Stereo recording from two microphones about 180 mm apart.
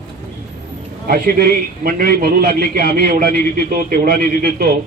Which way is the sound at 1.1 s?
55° right (ahead or behind).